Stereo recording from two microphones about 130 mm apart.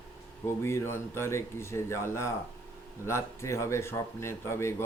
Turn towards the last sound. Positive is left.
turn(degrees=20)  # may be behind; listen again after turning